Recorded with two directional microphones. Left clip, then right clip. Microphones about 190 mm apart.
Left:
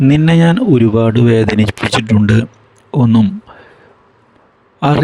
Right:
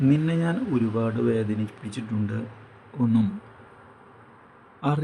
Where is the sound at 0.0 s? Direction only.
55° left (ahead or behind).